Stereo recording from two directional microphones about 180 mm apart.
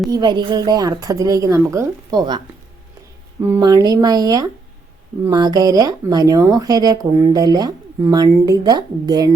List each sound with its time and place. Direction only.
0.1 s speech: 25° right (ahead or behind)
3.5 s speech: 20° right (ahead or behind)